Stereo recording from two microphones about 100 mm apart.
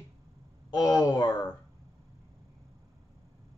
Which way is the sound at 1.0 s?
40° left (ahead or behind).